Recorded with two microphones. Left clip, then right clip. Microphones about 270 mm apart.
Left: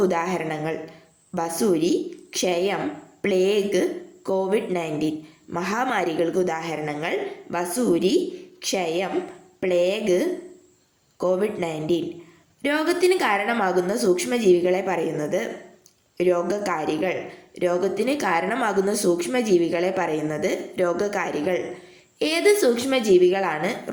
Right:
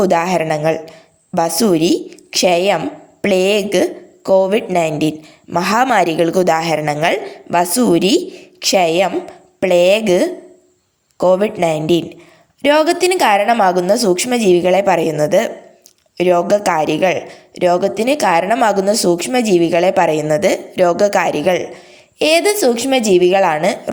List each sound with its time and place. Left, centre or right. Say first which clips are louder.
0.0 s a woman's voice: right 9 dB; right